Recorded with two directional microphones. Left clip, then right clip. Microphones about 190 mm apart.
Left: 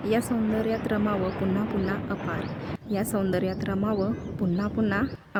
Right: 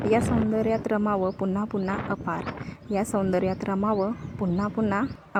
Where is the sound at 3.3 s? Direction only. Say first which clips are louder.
Right 2 dB; 5° left (ahead or behind).